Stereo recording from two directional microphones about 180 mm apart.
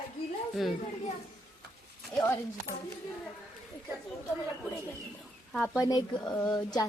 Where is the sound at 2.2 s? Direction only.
15° left (ahead or behind).